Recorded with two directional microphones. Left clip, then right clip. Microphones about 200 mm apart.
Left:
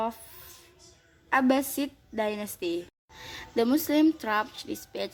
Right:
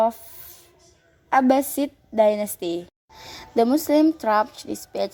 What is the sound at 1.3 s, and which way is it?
A woman's voice, 20° right (ahead or behind).